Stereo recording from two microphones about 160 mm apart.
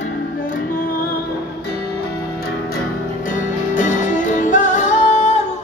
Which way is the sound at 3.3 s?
55° left (ahead or behind).